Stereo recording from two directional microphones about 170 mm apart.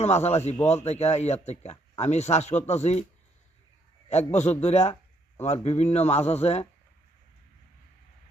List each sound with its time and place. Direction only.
0.0 s a man's voice: 40° left (ahead or behind)
4.1 s a man's voice: 40° left (ahead or behind)